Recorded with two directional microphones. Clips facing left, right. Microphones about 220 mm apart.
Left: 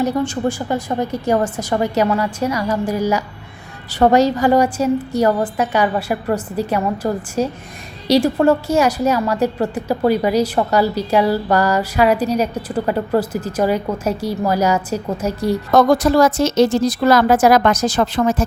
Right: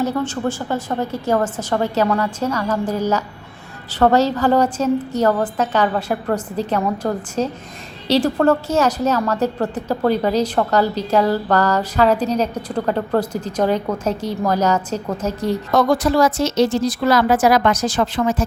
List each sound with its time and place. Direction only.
0.0 s a woman's voice: 15° left (ahead or behind)
15.7 s a woman's voice: 40° left (ahead or behind)